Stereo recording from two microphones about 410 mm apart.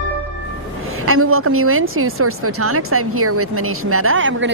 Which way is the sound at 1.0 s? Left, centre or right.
Right.